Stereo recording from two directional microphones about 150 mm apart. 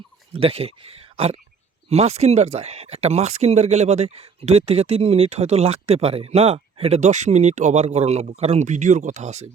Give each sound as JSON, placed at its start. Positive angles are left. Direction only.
{"t": 0.4, "sound": "speech", "side_deg": -40}